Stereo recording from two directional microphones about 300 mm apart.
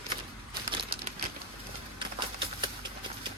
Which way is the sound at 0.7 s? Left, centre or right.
Centre.